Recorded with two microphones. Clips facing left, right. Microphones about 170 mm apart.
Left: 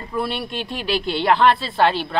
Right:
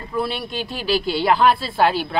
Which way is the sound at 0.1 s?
Centre (ahead or behind).